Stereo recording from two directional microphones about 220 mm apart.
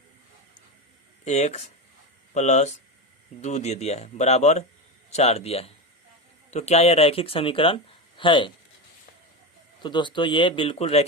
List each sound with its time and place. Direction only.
1.2 s speech: 30° left (ahead or behind)
9.8 s speech: 20° left (ahead or behind)